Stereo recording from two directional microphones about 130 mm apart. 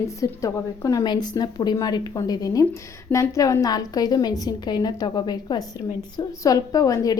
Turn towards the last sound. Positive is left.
turn(degrees=25)  # may be behind; listen again after turning